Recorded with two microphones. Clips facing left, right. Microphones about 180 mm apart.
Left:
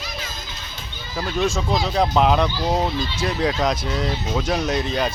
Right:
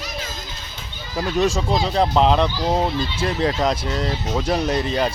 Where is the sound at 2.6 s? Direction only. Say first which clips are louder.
Right 1 dB; 10° right (ahead or behind).